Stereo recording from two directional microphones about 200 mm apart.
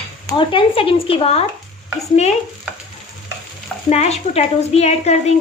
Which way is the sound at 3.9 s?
30° left (ahead or behind).